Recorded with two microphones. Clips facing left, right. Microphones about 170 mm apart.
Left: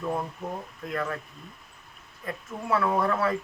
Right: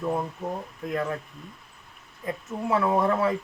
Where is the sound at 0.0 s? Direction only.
10° right (ahead or behind).